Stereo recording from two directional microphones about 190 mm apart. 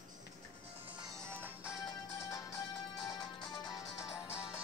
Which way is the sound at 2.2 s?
15° left (ahead or behind).